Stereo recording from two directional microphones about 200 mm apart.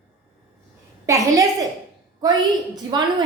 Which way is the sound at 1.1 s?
15° right (ahead or behind).